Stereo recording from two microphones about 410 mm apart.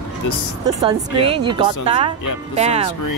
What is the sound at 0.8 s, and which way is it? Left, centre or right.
A woman's voice, centre.